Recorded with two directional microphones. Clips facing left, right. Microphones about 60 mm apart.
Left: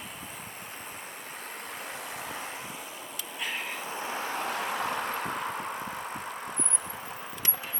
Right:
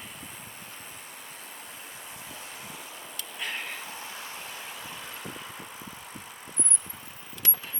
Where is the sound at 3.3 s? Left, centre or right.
Centre.